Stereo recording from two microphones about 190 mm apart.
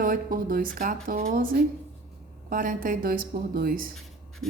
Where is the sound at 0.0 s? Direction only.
50° right (ahead or behind).